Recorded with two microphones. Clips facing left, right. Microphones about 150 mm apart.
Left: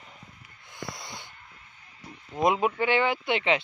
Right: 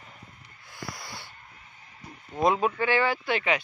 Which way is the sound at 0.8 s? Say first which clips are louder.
Left 1 dB; 20° left (ahead or behind).